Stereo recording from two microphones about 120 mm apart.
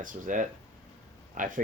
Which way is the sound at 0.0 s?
90° right.